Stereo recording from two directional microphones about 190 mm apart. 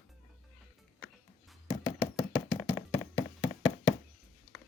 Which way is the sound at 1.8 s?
30° left (ahead or behind).